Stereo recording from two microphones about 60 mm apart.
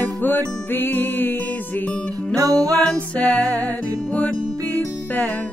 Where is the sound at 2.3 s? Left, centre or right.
Right.